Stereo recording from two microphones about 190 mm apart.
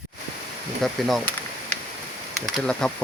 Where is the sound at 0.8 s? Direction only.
Centre (ahead or behind).